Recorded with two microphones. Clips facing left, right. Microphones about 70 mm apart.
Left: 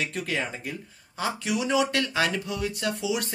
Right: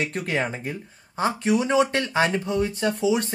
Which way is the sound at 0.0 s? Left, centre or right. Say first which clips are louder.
Right 4 dB; right.